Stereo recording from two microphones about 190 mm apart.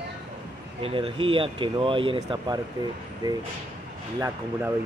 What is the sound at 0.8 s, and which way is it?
Speech, 30° right (ahead or behind).